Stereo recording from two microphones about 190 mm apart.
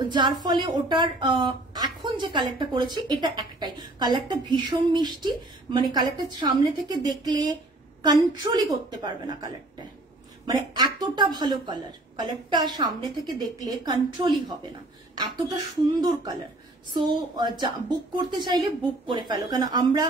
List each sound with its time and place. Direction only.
0.0 s a woman's voice: 25° right (ahead or behind)
10.4 s a woman's voice: 20° right (ahead or behind)